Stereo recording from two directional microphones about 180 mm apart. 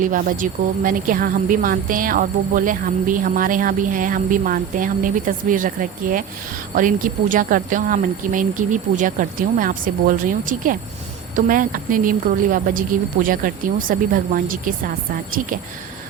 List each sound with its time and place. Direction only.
0.0 s a woman's voice: 50° right (ahead or behind)